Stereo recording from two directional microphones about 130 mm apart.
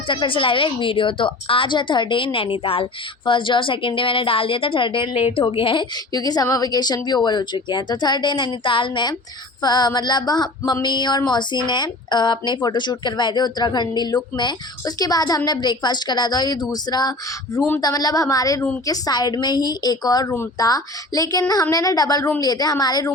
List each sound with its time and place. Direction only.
0.1 s a woman's voice: 40° left (ahead or behind)
6.1 s a woman's voice: 30° left (ahead or behind)